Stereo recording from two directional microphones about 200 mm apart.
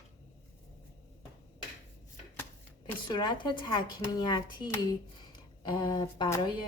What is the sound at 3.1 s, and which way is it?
Speech, 20° left (ahead or behind).